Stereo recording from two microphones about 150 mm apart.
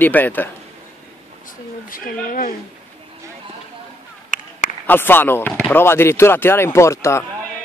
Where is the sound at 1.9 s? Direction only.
70° left (ahead or behind).